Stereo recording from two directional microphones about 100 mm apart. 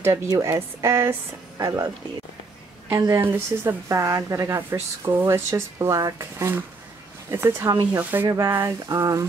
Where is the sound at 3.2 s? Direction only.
20° right (ahead or behind).